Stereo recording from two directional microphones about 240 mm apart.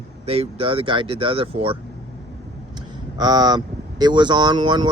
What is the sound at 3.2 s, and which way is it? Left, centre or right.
Speech, centre.